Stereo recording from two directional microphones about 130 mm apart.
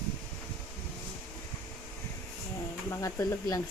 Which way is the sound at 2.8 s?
20° left (ahead or behind).